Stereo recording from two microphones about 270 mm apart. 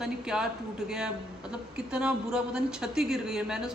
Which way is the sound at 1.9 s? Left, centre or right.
Centre.